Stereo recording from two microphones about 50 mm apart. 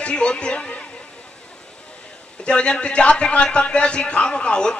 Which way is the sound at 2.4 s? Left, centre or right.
Left.